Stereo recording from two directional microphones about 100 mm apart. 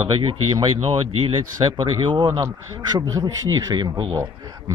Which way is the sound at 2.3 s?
35° right (ahead or behind).